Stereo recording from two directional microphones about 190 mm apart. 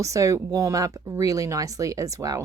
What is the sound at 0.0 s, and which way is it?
Speech, 15° right (ahead or behind).